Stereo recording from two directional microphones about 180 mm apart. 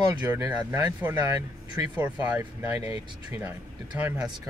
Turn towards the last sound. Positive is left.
turn(degrees=-10)  # may be behind; listen again after turning